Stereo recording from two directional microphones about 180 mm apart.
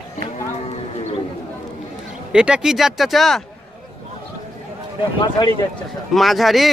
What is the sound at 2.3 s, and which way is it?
A man's voice, 5° right (ahead or behind).